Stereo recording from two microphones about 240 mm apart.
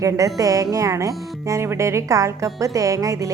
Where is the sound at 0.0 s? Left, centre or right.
Centre.